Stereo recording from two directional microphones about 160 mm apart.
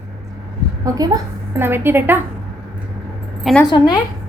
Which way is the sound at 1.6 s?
15° right (ahead or behind).